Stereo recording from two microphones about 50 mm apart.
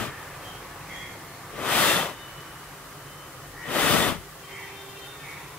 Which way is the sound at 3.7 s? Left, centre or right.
Left.